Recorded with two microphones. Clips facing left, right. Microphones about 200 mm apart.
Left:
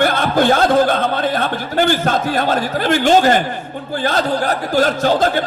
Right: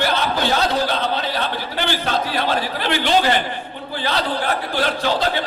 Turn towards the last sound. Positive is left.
turn(degrees=45)  # may be behind; listen again after turning